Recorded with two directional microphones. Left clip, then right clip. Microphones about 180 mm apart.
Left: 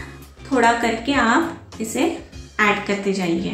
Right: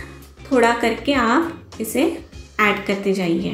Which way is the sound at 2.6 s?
20° right (ahead or behind).